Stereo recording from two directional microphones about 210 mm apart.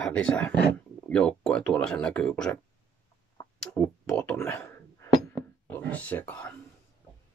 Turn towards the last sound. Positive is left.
turn(degrees=5)  # may be behind; listen again after turning